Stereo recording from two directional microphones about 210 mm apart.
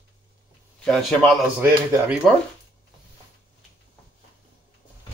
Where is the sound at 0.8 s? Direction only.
Centre (ahead or behind).